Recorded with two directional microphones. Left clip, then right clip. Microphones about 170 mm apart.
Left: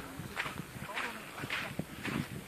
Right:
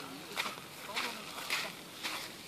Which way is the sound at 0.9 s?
35° right (ahead or behind).